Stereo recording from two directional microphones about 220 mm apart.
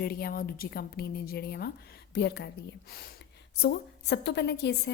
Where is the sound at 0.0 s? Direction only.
45° left (ahead or behind).